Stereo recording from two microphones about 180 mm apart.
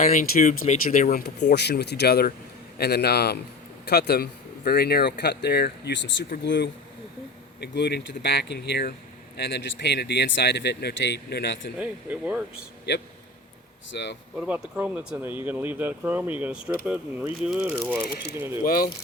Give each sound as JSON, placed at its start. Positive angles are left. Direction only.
{"t": 0.0, "sound": "speech", "side_deg": 50}
{"t": 11.8, "sound": "speech", "side_deg": -10}
{"t": 13.9, "sound": "speech", "side_deg": 75}
{"t": 14.3, "sound": "speech", "side_deg": -5}
{"t": 18.6, "sound": "speech", "side_deg": 55}